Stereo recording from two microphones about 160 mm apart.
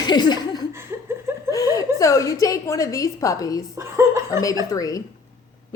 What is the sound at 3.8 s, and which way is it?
Chuckle, 20° right (ahead or behind).